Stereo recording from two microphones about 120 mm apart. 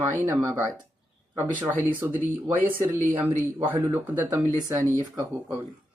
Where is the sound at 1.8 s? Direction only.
15° right (ahead or behind).